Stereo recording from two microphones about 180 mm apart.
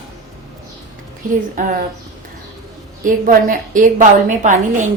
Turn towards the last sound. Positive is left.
turn(degrees=-45)  # may be behind; listen again after turning